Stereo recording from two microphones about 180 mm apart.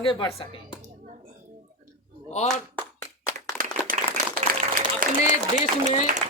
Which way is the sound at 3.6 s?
45° right (ahead or behind).